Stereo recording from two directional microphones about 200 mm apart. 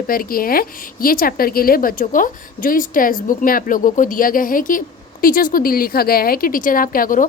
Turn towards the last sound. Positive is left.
turn(degrees=45)  # may be behind; listen again after turning